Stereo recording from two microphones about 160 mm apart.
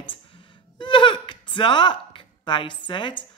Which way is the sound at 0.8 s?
30° left (ahead or behind).